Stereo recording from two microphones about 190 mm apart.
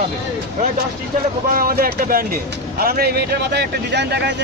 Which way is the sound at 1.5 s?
50° right (ahead or behind).